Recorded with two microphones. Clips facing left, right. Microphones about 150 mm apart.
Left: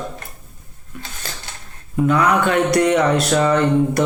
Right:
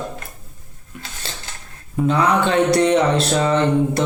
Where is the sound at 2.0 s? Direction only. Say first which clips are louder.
Left 1 dB; 25° right (ahead or behind).